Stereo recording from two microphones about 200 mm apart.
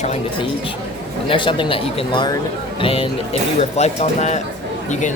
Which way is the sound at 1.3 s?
25° left (ahead or behind).